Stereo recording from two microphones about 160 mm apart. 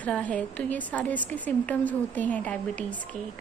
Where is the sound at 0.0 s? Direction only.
10° left (ahead or behind).